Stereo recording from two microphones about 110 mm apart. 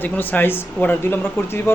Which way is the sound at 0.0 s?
15° left (ahead or behind).